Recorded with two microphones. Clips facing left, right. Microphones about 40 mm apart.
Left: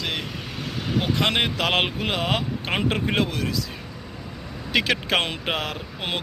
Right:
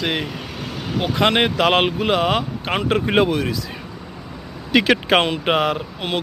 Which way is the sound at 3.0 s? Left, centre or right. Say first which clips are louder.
Right 6 dB; right.